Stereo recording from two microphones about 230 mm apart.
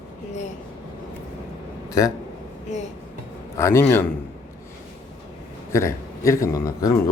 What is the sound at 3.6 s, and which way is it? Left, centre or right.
Speech, centre.